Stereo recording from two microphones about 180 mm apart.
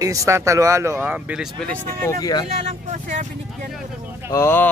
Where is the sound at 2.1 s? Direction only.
20° left (ahead or behind).